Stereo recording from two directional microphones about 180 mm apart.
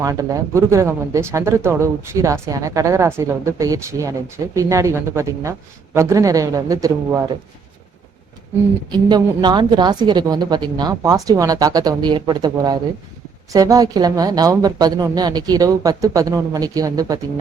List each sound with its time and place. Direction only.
0.0 s speech: 20° right (ahead or behind)
8.9 s a woman's voice: 25° right (ahead or behind)